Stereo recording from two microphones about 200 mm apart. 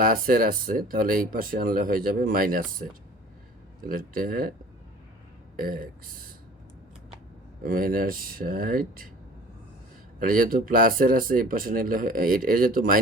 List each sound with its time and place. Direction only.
0.0 s speech: 45° right (ahead or behind)
3.8 s speech: 45° right (ahead or behind)
5.5 s speech: 45° right (ahead or behind)
7.6 s speech: 45° right (ahead or behind)
10.2 s speech: 45° right (ahead or behind)